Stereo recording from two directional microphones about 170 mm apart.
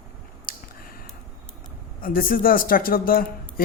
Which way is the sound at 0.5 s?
55° left (ahead or behind).